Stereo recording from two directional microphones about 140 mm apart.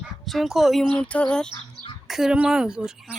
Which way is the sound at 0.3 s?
Centre (ahead or behind).